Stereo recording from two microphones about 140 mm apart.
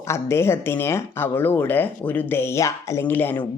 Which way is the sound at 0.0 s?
20° left (ahead or behind).